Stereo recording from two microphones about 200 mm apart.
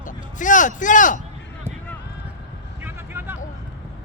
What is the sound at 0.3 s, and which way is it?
Speech, 40° left (ahead or behind).